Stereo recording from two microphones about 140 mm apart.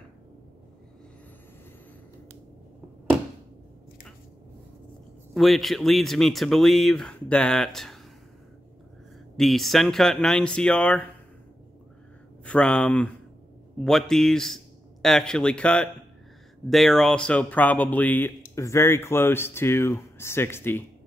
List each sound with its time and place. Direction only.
5.3 s speech: centre (ahead or behind)
9.4 s speech: centre (ahead or behind)
12.4 s a man's voice: 5° left (ahead or behind)